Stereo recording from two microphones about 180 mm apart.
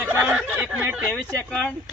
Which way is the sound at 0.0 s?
10° right (ahead or behind).